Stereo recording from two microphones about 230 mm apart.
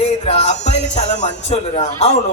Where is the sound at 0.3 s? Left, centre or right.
Left.